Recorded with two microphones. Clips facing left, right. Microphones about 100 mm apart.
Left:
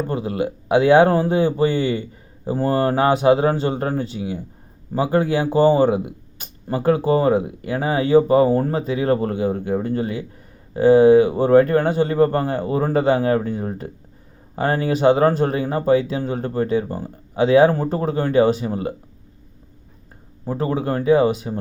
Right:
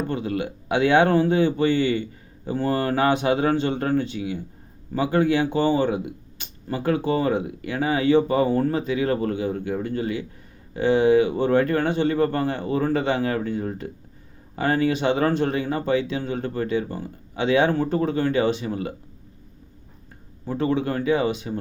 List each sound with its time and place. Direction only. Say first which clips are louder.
0.1 s speech: left 3 dB; 35° left (ahead or behind)
20.5 s speech: left 1 dB; 35° left (ahead or behind)